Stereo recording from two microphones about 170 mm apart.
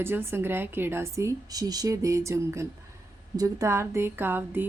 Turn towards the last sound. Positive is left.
turn(degrees=-10)  # may be behind; listen again after turning